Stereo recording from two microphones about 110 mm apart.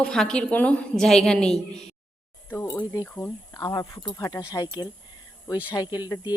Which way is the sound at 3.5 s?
30° left (ahead or behind).